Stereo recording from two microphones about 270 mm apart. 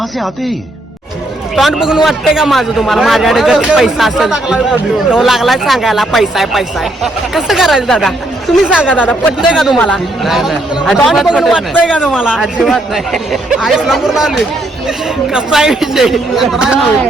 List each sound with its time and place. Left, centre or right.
1.5 s speech: centre